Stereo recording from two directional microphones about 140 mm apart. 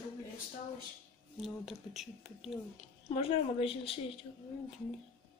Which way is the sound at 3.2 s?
45° left (ahead or behind).